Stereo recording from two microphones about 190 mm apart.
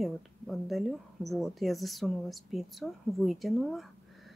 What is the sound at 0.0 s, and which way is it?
Speech, centre (ahead or behind).